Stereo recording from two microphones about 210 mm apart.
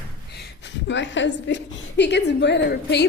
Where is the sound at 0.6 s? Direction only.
60° left (ahead or behind).